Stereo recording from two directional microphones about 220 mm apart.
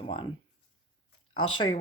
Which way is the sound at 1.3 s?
20° left (ahead or behind).